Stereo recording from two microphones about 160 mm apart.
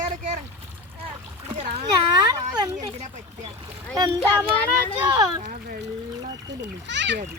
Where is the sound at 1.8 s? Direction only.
25° right (ahead or behind).